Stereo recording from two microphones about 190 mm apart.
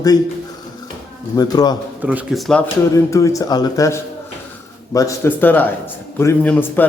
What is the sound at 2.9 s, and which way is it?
Speech, 15° left (ahead or behind).